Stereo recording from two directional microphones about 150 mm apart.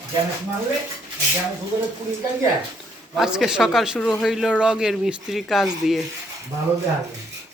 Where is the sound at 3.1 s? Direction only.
Centre (ahead or behind).